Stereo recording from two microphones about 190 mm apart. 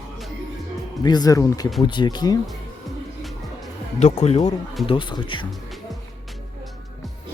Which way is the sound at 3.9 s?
35° left (ahead or behind).